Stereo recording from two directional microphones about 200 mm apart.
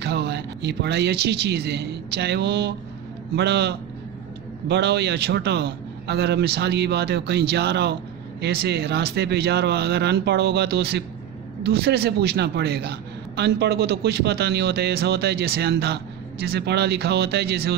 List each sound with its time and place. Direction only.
0.0 s a man's voice: 60° right (ahead or behind)